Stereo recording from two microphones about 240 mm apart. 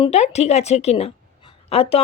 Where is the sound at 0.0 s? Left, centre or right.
Left.